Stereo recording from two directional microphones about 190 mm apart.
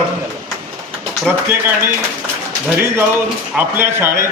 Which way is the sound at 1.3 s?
10° right (ahead or behind).